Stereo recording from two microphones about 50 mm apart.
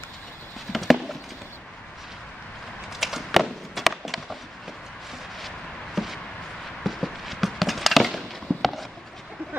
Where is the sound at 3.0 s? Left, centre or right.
Centre.